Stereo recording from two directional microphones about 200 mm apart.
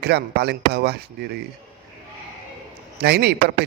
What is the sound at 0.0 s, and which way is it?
Speech, 55° right (ahead or behind).